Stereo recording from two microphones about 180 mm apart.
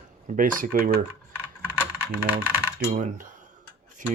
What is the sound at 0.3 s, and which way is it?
Speech, 50° right (ahead or behind).